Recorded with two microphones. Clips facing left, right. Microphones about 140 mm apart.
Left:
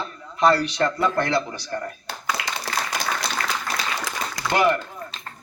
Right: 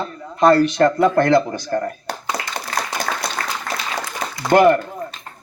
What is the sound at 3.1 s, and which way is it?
Applause, 60° right (ahead or behind).